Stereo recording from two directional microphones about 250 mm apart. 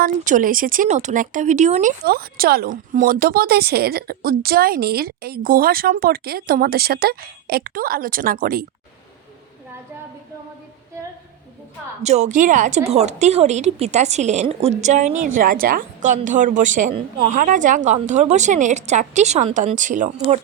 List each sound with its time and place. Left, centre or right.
0.0 s speech: right
12.0 s a woman's voice: right